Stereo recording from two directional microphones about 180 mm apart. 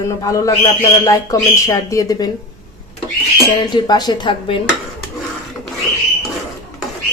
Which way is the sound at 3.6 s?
20° left (ahead or behind).